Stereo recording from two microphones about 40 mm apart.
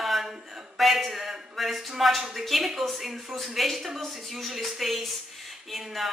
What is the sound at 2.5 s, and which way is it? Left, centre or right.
A woman's voice, centre.